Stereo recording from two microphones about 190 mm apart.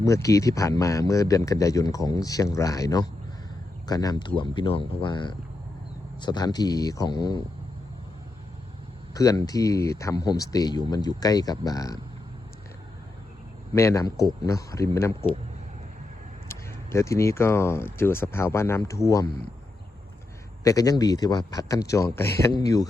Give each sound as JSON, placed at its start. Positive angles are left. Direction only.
{"t": 0.0, "sound": "speech", "side_deg": 15}
{"t": 9.1, "sound": "speech", "side_deg": 20}
{"t": 13.7, "sound": "speech", "side_deg": 15}
{"t": 16.5, "sound": "speech", "side_deg": 15}
{"t": 20.7, "sound": "speech", "side_deg": 20}